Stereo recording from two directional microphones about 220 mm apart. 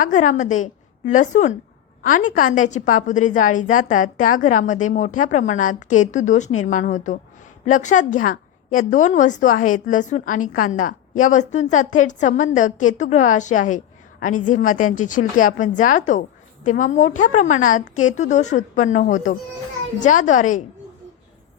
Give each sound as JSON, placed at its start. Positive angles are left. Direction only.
{"t": 0.0, "sound": "a woman's voice", "side_deg": 35}